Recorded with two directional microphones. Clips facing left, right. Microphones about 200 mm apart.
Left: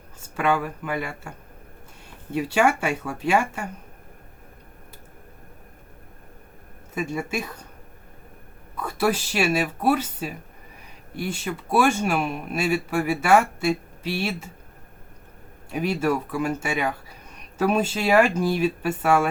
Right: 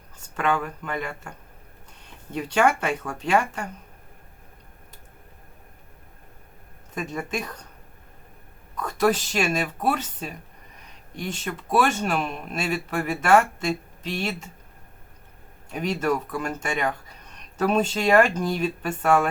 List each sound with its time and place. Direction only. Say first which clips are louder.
0.3 s speech: left 2 dB; 10° left (ahead or behind)
2.3 s speech: left 1 dB; 5° left (ahead or behind)
6.9 s speech: left 2 dB; 10° left (ahead or behind)
8.7 s speech: right 1 dB; 10° left (ahead or behind)
15.7 s speech: left 1 dB; 10° left (ahead or behind)